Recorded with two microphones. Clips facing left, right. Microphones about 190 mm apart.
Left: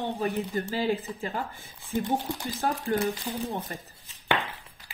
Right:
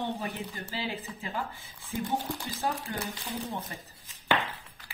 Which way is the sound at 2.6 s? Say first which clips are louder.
Left 3 dB; 55° left (ahead or behind).